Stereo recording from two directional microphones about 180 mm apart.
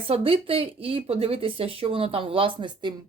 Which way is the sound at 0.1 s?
30° right (ahead or behind).